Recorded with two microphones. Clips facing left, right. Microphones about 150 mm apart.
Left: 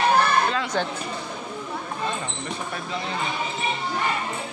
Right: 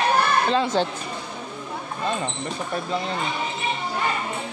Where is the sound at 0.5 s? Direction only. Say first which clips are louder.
Right 4 dB; 25° right (ahead or behind).